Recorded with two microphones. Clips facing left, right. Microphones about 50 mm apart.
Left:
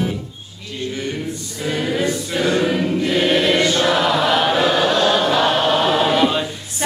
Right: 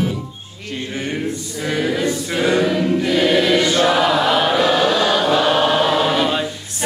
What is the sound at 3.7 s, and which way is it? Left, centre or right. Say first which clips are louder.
Chant: right 2 dB; centre.